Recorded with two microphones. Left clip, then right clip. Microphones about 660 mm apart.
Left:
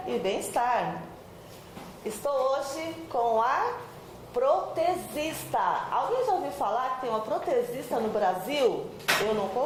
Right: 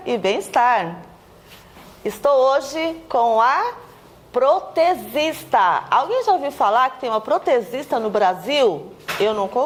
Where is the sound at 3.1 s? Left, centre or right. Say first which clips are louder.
Right 9 dB; right.